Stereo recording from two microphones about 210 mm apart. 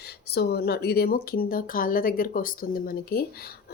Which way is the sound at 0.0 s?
50° left (ahead or behind).